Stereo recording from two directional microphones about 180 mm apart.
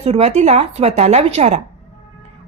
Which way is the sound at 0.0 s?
35° right (ahead or behind).